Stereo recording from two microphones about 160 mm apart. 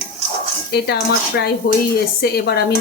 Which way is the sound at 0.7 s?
85° left.